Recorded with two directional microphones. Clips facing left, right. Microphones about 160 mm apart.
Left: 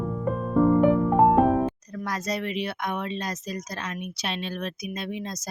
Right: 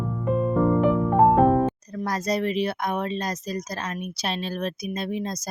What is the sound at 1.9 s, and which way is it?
Speech, 35° right (ahead or behind).